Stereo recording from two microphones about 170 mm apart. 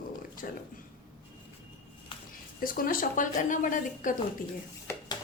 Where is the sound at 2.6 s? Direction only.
55° left (ahead or behind).